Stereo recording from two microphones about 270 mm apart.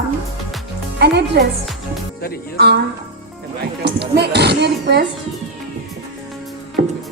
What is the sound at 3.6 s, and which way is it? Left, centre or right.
Speech, right.